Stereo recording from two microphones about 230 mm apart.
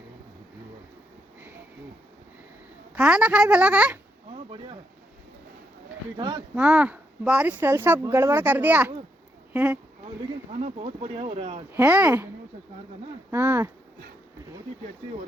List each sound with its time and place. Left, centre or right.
2.9 s speech: centre
4.5 s a sound: right
6.1 s speech: centre
6.6 s speech: centre
10.6 s speech: right
11.7 s speech: centre
13.3 s speech: centre